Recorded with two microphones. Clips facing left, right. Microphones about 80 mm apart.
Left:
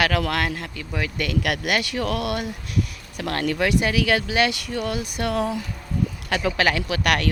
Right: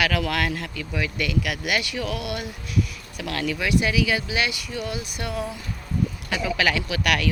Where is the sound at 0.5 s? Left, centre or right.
Left.